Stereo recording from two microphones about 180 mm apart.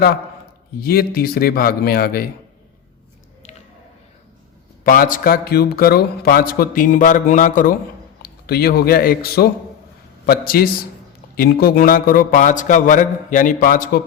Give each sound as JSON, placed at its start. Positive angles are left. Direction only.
{"t": 0.8, "sound": "speech", "side_deg": 55}
{"t": 4.8, "sound": "speech", "side_deg": 50}
{"t": 8.2, "sound": "speech", "side_deg": 60}